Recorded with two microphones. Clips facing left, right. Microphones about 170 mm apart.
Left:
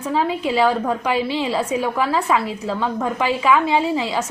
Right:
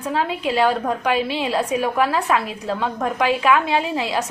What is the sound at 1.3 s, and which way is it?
A woman's voice, 10° right (ahead or behind).